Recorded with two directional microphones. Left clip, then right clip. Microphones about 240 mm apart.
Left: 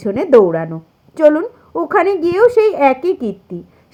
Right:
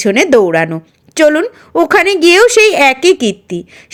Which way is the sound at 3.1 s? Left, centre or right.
Right.